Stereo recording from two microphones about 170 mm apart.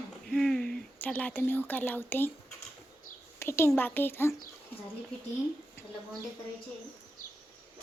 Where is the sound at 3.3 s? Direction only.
15° left (ahead or behind).